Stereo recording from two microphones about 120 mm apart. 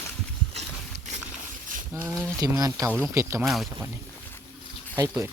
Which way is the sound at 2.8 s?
15° right (ahead or behind).